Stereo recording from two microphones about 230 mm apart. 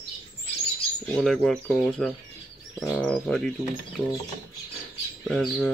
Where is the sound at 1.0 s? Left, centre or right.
Centre.